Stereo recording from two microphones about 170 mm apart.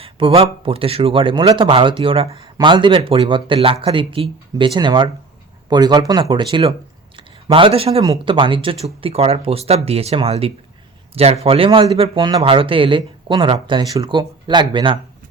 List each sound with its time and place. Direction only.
0.0 s a man's voice: 35° right (ahead or behind)